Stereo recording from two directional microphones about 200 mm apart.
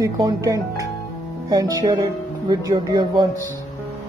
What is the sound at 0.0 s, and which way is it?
Speech, 15° right (ahead or behind).